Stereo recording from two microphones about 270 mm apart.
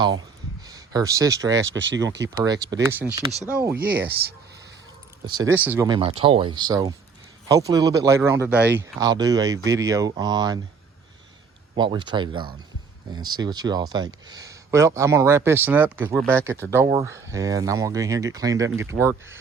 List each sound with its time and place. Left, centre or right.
0.2 s a sound: centre
1.5 s speech: right
2.3 s speech: centre
3.8 s speech: right
5.2 s speech: centre
11.8 s speech: centre